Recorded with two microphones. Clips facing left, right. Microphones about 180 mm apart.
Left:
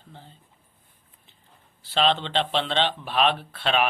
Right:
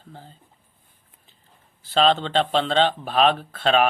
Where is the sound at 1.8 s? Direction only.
40° right (ahead or behind).